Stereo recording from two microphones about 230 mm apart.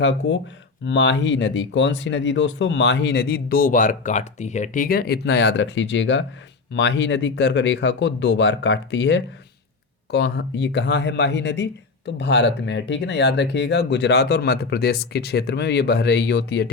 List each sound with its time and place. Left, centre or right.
0.0 s speech: left